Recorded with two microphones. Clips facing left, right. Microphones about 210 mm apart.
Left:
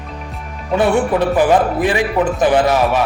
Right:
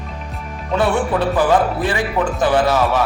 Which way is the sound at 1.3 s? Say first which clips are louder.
Left 2 dB; 15° left (ahead or behind).